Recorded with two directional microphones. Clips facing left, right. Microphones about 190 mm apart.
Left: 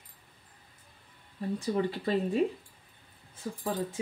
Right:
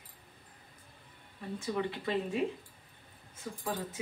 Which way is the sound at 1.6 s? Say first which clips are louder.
Left 3 dB; 35° left (ahead or behind).